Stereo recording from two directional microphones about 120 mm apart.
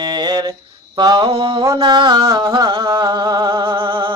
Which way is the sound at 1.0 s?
30° right (ahead or behind).